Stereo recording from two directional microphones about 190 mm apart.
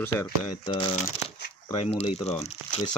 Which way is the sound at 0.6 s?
25° left (ahead or behind).